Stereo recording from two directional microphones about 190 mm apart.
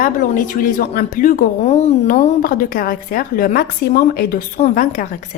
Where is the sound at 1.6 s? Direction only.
35° left (ahead or behind).